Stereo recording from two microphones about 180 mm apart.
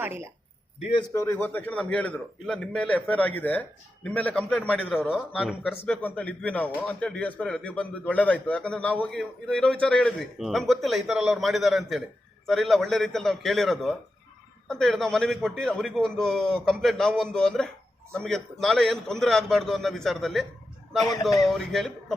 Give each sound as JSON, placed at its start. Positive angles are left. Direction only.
{"t": 1.1, "sound": "a man's voice", "side_deg": 15}
{"t": 5.7, "sound": "a man's voice", "side_deg": 10}
{"t": 21.4, "sound": "a man's voice", "side_deg": 0}